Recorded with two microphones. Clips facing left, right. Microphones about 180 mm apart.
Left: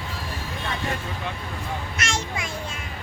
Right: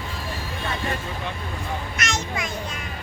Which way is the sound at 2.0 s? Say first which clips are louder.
Right 1 dB; 30° left (ahead or behind).